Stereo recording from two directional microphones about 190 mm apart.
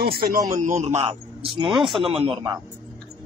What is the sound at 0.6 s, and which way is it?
Speech, 40° right (ahead or behind).